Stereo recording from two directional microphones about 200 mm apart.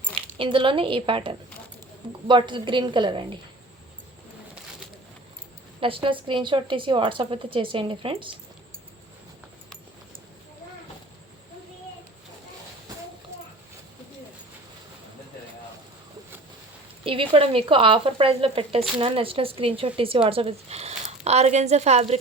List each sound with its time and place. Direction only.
0.3 s speech: 25° right (ahead or behind)
5.8 s speech: 25° right (ahead or behind)
17.0 s a woman's voice: 25° right (ahead or behind)